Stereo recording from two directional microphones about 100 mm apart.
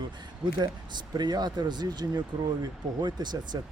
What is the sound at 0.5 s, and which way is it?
Speech, 45° right (ahead or behind).